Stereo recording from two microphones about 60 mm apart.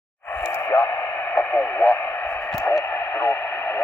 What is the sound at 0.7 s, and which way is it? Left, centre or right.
Radio, left.